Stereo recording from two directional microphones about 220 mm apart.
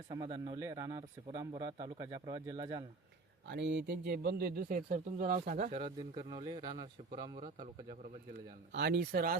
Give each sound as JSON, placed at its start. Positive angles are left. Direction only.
{"t": 0.1, "sound": "speech", "side_deg": -20}
{"t": 3.5, "sound": "speech", "side_deg": -50}
{"t": 5.7, "sound": "a man's voice", "side_deg": -20}
{"t": 8.7, "sound": "speech", "side_deg": -50}